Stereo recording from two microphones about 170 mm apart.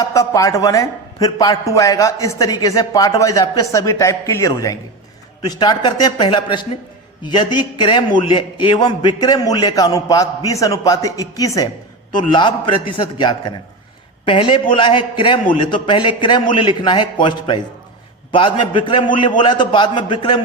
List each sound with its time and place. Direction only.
0.0 s a man's voice: 20° left (ahead or behind)